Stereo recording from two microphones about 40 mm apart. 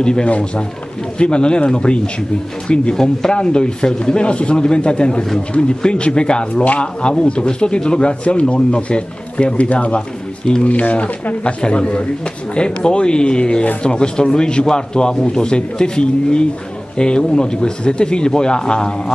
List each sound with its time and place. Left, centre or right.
0.0 s speech: left
6.5 s speech: left
6.8 s speech: left
11.4 s speech: left